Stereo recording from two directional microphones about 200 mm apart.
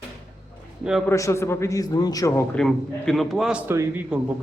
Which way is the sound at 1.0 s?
15° left (ahead or behind).